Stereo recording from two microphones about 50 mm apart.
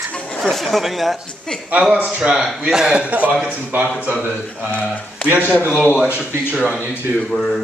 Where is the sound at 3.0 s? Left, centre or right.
Right.